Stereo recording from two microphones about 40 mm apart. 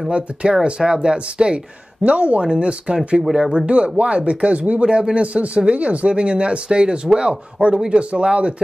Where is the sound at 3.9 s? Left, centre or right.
Right.